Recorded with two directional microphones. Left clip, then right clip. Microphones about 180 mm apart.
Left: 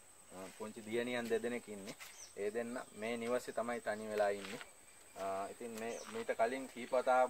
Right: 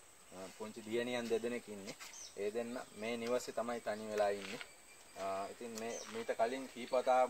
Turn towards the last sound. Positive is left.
turn(degrees=-10)  # may be behind; listen again after turning